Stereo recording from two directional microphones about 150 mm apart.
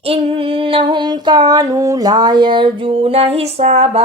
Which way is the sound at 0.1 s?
35° right (ahead or behind).